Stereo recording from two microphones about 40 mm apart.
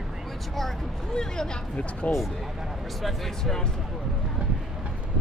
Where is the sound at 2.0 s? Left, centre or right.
Left.